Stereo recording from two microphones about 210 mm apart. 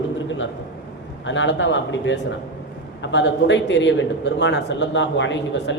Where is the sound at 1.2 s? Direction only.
60° left (ahead or behind).